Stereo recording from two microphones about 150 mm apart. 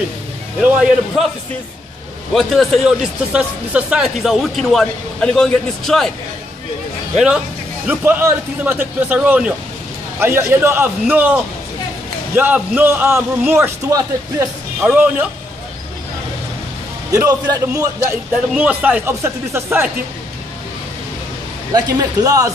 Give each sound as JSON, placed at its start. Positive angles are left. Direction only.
{"t": 0.6, "sound": "speech", "side_deg": -5}
{"t": 2.3, "sound": "speech", "side_deg": 0}
{"t": 7.2, "sound": "a man's voice", "side_deg": -5}
{"t": 17.1, "sound": "a man's voice", "side_deg": -25}
{"t": 18.5, "sound": "a man's voice", "side_deg": -10}
{"t": 21.7, "sound": "a man's voice", "side_deg": -25}